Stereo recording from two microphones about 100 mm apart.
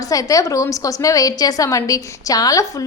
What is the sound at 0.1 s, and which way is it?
A woman's voice, 35° left (ahead or behind).